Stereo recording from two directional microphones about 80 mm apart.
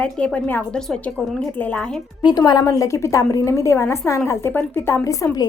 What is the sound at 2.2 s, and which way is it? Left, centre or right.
Speech, left.